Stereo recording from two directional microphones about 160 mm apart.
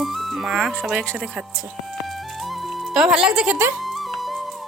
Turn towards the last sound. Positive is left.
turn(degrees=0)  # may be behind; listen again after turning